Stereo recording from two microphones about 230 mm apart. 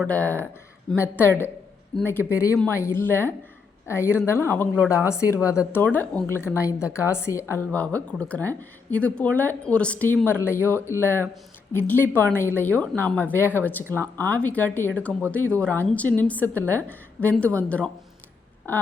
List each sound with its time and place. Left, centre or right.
0.0 s a woman's voice: centre